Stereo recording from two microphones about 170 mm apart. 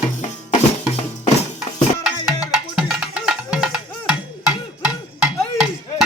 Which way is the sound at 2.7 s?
5° right (ahead or behind).